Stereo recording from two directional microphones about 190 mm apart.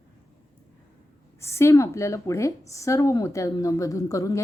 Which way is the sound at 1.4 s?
15° left (ahead or behind).